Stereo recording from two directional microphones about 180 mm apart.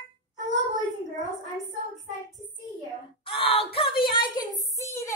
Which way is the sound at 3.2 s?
30° left (ahead or behind).